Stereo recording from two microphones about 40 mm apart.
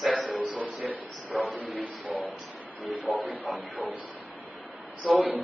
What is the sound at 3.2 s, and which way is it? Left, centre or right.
Speech, right.